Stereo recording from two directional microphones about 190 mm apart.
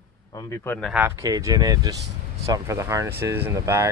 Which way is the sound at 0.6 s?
10° left (ahead or behind).